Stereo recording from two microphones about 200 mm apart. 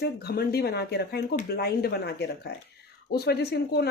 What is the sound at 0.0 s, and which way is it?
A woman's voice, 50° left (ahead or behind).